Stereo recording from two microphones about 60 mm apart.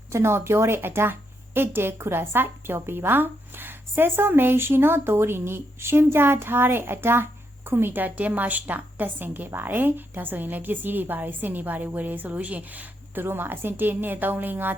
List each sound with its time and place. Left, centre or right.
0.1 s a woman's voice: right
13.2 s a woman's voice: right